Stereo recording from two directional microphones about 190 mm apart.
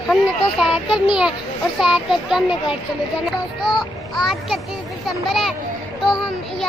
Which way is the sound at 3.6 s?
Centre (ahead or behind).